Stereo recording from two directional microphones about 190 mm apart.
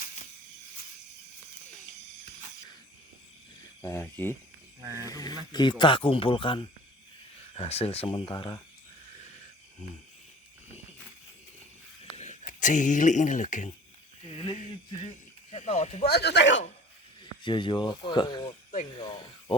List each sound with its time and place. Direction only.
3.8 s speech: 15° left (ahead or behind)
4.8 s speech: 15° right (ahead or behind)
5.0 s speech: 20° left (ahead or behind)
12.1 s speech: 40° left (ahead or behind)
15.5 s speech: 35° left (ahead or behind)
16.0 s speech: 60° left (ahead or behind)
17.4 s speech: 25° left (ahead or behind)